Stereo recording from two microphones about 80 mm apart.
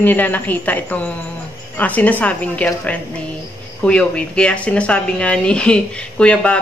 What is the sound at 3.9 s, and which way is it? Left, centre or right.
Speech, centre.